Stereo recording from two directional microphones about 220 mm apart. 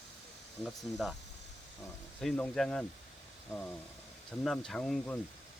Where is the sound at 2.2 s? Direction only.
5° left (ahead or behind).